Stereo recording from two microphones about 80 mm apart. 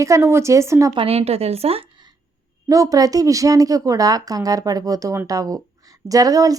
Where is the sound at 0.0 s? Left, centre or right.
Right.